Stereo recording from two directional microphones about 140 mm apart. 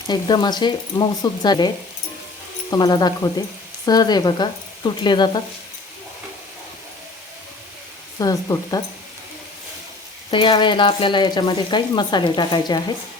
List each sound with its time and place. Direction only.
0.1 s speech: 30° left (ahead or behind)
8.2 s speech: 25° left (ahead or behind)
10.3 s speech: 35° left (ahead or behind)